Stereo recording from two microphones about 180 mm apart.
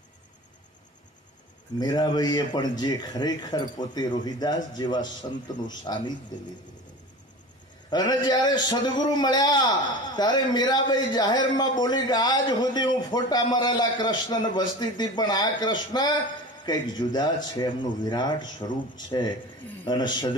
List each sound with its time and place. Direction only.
1.8 s a man's voice: 20° left (ahead or behind)
7.9 s a man's voice: 25° left (ahead or behind)